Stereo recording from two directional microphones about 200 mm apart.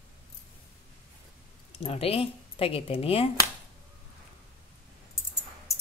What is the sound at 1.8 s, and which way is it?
Speech, 30° left (ahead or behind).